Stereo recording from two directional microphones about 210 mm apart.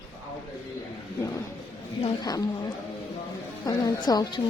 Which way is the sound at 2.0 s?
20° left (ahead or behind).